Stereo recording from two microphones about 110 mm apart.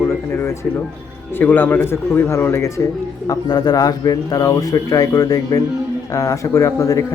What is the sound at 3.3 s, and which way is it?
A man's voice, 40° left (ahead or behind).